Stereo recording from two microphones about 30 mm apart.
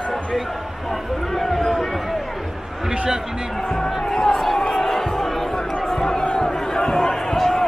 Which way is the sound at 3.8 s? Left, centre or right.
Left.